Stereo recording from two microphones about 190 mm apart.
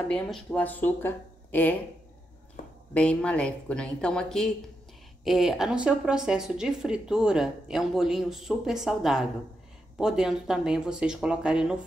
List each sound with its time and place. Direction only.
0.1 s speech: 5° left (ahead or behind)
2.6 s a sound: 45° left (ahead or behind)
2.9 s a woman's voice: 5° left (ahead or behind)